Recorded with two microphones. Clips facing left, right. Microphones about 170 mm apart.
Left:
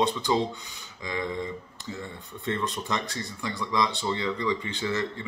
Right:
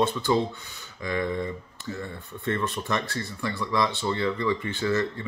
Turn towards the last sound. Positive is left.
turn(degrees=20)  # may be behind; listen again after turning